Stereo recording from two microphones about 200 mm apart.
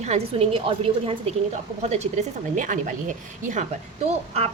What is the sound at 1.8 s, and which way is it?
Speech, 35° right (ahead or behind).